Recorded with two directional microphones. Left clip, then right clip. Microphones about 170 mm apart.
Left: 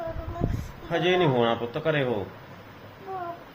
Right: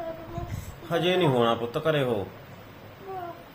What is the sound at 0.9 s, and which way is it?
A man's voice, 25° right (ahead or behind).